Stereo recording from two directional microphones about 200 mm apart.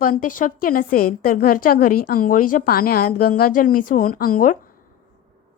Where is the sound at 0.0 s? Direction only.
45° left (ahead or behind).